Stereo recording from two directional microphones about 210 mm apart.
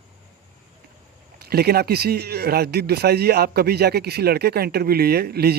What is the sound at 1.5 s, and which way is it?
Speech, 50° right (ahead or behind).